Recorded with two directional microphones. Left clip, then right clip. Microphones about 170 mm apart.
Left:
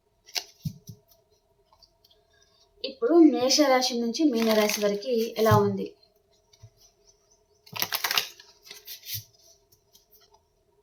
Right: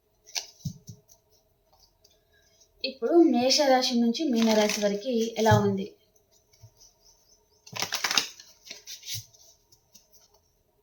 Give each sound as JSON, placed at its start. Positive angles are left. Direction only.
{"t": 3.0, "sound": "speech", "side_deg": 25}
{"t": 4.4, "sound": "speech", "side_deg": 15}
{"t": 7.7, "sound": "typing", "side_deg": 15}